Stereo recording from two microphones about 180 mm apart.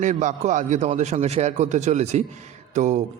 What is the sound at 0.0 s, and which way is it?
A man's voice, 45° right (ahead or behind).